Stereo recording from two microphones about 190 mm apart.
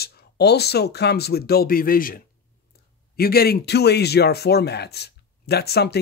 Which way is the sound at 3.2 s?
55° left (ahead or behind).